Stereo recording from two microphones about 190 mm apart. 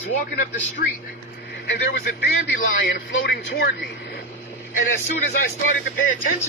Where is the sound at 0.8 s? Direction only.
45° left (ahead or behind).